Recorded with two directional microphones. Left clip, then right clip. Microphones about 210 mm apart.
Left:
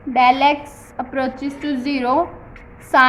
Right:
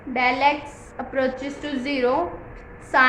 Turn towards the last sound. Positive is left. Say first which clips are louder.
# left 4 dB
turn(degrees=35)  # may be behind; listen again after turning